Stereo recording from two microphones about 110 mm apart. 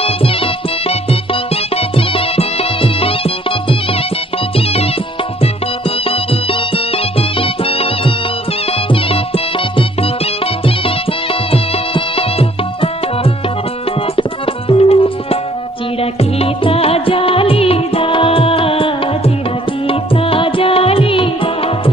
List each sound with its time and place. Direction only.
0.0 s music: 60° left (ahead or behind)
5.4 s music: 60° left (ahead or behind)
11.5 s music: 60° left (ahead or behind)
14.7 s music: 60° left (ahead or behind)